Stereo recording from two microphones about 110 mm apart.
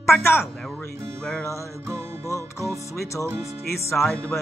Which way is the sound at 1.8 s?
25° right (ahead or behind).